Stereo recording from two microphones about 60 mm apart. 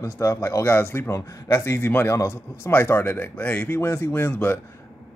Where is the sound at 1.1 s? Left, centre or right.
Left.